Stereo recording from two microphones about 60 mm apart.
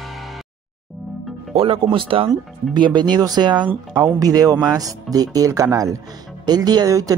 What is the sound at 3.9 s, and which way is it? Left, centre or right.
Speech, right.